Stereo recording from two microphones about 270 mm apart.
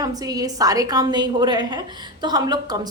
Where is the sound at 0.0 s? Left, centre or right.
Centre.